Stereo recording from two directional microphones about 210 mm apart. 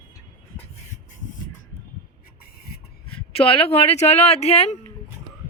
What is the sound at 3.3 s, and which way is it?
A woman's voice, 25° left (ahead or behind).